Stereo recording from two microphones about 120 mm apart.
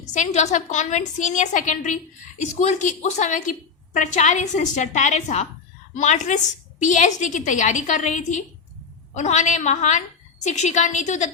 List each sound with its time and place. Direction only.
0.0 s a woman's voice: 80° left
5.9 s a woman's voice: 90° left
9.1 s a woman's voice: 75° left (ahead or behind)